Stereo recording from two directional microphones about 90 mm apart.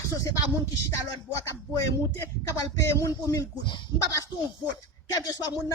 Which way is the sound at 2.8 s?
35° left (ahead or behind).